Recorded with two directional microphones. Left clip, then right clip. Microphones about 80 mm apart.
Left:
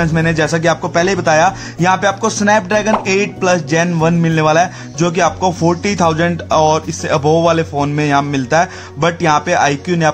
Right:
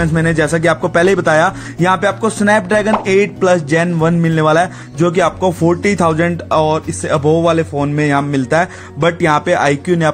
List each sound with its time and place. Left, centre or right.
0.0 s speech: right
0.8 s speech: right
1.2 s a man's voice: right; by 8.0 s centre
8.0 s a man's voice: right